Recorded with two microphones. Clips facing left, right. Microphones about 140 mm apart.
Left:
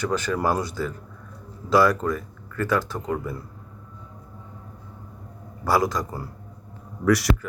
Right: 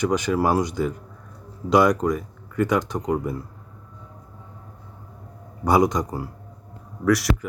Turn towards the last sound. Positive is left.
turn(degrees=0)  # may be behind; listen again after turning